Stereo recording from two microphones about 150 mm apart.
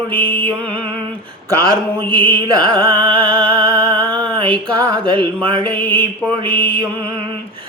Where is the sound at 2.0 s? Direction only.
10° left (ahead or behind).